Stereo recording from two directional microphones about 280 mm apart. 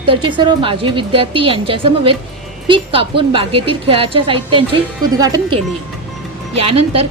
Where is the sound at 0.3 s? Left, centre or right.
Centre.